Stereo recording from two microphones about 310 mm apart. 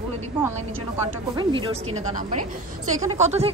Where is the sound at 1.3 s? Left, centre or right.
Centre.